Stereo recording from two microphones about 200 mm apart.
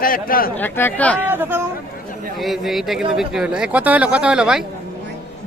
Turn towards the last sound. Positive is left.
turn(degrees=-5)  # may be behind; listen again after turning